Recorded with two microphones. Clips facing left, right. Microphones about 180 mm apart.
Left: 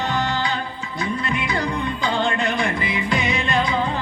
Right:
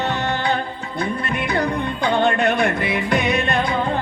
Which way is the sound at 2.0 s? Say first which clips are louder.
Right 6 dB; 60° right (ahead or behind).